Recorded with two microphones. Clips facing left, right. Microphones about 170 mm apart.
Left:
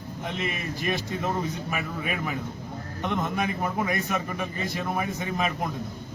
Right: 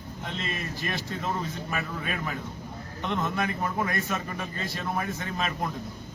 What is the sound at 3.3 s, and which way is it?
A man's voice, 15° left (ahead or behind).